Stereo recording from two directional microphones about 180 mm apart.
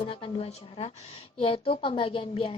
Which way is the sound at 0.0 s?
30° left (ahead or behind).